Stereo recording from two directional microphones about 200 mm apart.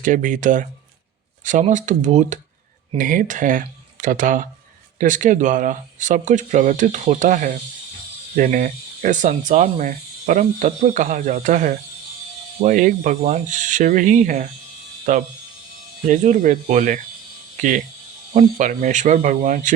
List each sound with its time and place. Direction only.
0.0 s speech: 40° right (ahead or behind)